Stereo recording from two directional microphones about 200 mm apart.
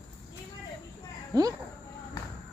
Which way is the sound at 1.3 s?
20° right (ahead or behind).